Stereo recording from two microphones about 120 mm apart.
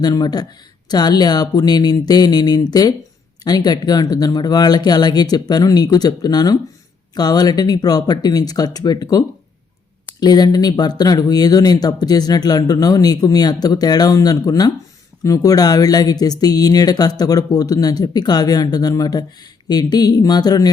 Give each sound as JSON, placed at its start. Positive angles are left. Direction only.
{"t": 0.0, "sound": "speech", "side_deg": 35}